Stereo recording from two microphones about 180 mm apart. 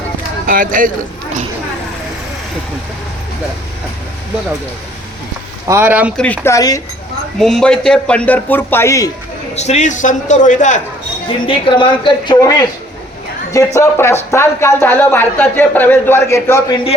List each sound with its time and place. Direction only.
0.4 s speech: 50° right (ahead or behind)
5.6 s speech: 10° right (ahead or behind)
6.1 s speech: 10° left (ahead or behind)
7.3 s speech: centre (ahead or behind)
9.6 s a man's voice: 40° left (ahead or behind)
11.3 s speech: 30° left (ahead or behind)
13.7 s speech: 15° left (ahead or behind)